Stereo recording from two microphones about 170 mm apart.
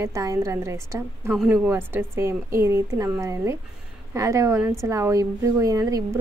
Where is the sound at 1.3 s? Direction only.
5° right (ahead or behind).